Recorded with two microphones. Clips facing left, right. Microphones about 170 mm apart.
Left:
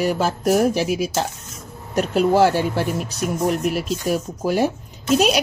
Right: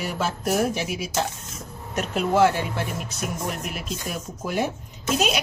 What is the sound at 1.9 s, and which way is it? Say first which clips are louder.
Speech: left 6 dB; 35° left (ahead or behind).